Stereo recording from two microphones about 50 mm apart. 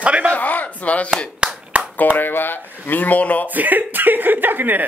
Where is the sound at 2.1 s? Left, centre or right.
Left.